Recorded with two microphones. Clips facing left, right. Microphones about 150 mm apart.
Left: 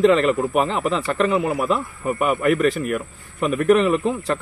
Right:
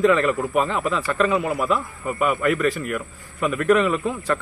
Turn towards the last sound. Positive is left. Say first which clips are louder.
# left 3 dB
turn(degrees=20)  # may be behind; listen again after turning